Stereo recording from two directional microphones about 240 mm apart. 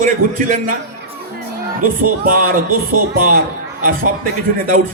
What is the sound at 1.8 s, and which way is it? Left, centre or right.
Speech, right.